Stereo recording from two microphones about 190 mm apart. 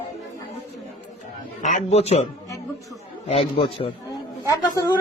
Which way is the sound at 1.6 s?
35° left (ahead or behind).